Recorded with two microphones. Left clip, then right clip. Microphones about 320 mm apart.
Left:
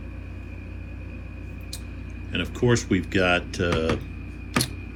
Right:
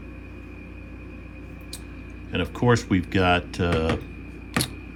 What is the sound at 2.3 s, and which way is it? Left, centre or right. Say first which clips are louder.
Speech: right 1 dB; centre.